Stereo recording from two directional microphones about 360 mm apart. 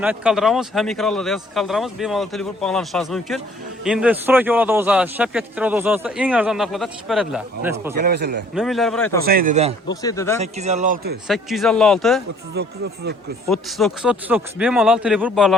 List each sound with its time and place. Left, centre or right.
0.0 s a man's voice: centre
7.9 s speech: right
8.5 s a man's voice: centre
9.2 s speech: right
9.9 s a man's voice: centre
10.4 s speech: centre
11.3 s a man's voice: centre
12.6 s speech: right
13.5 s a man's voice: centre